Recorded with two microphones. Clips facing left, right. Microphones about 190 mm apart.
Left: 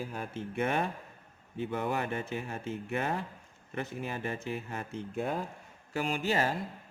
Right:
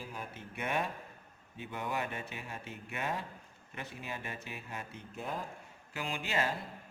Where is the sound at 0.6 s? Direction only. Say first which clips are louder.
Left 4 dB; 45° left (ahead or behind).